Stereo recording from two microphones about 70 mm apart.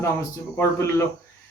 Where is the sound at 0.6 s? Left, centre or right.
Left.